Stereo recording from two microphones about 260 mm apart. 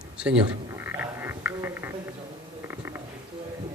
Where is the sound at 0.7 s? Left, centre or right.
Centre.